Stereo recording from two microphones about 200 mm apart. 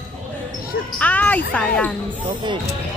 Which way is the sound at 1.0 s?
5° left (ahead or behind).